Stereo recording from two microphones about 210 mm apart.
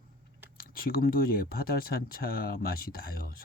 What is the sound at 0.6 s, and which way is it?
Speech, 45° left (ahead or behind).